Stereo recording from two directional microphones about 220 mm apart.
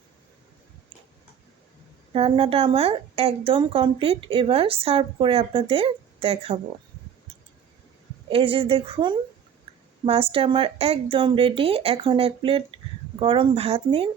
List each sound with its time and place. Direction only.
2.1 s a woman's voice: 25° right (ahead or behind)
8.3 s a woman's voice: 25° right (ahead or behind)